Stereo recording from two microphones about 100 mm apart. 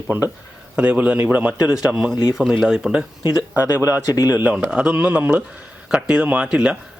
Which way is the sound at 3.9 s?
35° left (ahead or behind).